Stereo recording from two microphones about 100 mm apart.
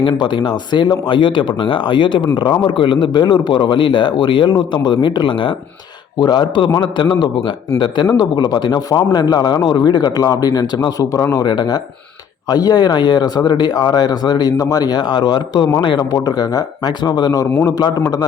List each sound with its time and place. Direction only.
0.0 s speech: 50° left (ahead or behind); by 11.4 s 35° left (ahead or behind)
11.4 s speech: 45° left (ahead or behind)
16.1 s speech: 40° left (ahead or behind)
17.5 s a man's voice: 25° left (ahead or behind)